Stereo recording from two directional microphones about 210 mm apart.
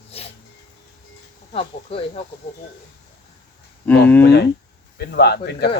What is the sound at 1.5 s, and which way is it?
Speech, 25° left (ahead or behind).